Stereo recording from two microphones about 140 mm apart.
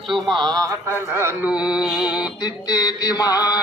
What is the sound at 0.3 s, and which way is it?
Speech, 35° right (ahead or behind).